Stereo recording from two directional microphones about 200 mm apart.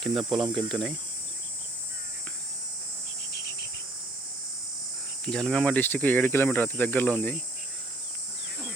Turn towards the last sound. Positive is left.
turn(degrees=5)  # may be behind; listen again after turning